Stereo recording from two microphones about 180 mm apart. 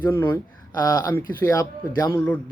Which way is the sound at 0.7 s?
20° left (ahead or behind).